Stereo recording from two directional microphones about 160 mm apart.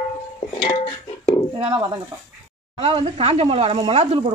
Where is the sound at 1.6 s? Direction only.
30° right (ahead or behind).